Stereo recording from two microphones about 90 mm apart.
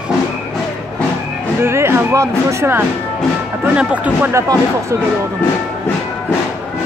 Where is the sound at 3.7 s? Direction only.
15° right (ahead or behind).